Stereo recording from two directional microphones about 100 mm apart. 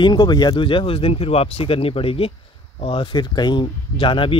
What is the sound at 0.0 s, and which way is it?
Speech, 45° left (ahead or behind).